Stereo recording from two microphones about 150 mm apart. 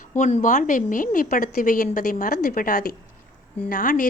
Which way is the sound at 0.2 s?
50° left (ahead or behind).